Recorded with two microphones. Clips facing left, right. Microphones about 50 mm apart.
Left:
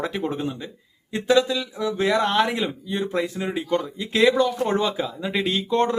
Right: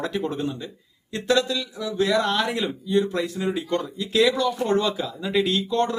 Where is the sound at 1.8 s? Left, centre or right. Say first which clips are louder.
Left 1 dB; left.